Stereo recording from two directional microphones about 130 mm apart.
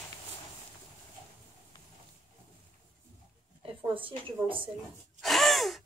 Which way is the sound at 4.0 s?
40° right (ahead or behind).